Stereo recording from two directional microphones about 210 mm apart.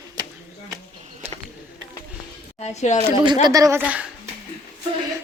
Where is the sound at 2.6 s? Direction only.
35° left (ahead or behind).